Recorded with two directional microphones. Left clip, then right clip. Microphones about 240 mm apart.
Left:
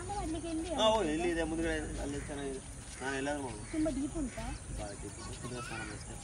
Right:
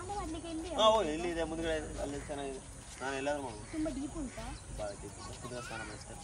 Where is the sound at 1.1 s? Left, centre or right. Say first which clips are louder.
Left 2 dB; right.